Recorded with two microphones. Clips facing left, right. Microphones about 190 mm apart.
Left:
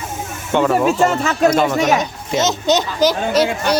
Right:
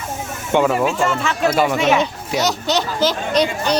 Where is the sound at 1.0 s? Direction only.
40° left (ahead or behind).